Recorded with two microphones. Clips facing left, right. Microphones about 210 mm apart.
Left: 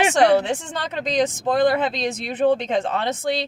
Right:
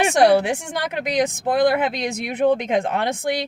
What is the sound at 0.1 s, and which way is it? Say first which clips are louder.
Speech: right 1 dB; 10° right (ahead or behind).